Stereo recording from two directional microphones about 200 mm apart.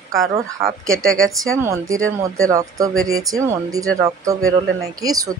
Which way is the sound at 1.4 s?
15° right (ahead or behind).